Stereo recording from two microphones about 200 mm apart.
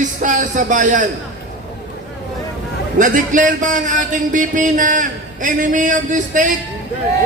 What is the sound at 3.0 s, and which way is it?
A man's voice, 40° right (ahead or behind).